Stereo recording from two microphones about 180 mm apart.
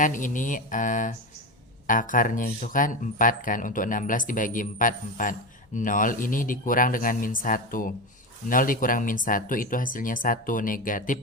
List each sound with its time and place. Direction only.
0.0 s speech: 45° left (ahead or behind)